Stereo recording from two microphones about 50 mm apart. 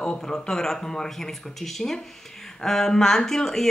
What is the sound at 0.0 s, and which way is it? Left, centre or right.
Speech, left.